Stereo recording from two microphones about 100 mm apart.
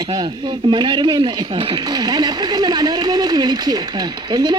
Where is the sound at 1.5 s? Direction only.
65° right (ahead or behind).